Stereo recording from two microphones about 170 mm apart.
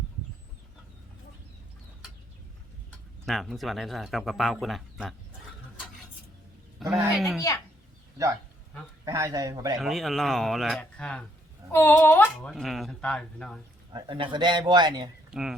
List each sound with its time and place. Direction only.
3.2 s a man's voice: centre (ahead or behind)
6.7 s a man's voice: centre (ahead or behind)
9.0 s a man's voice: 20° right (ahead or behind)
9.7 s a man's voice: centre (ahead or behind)
13.9 s a man's voice: 30° right (ahead or behind)
15.3 s speech: 5° right (ahead or behind)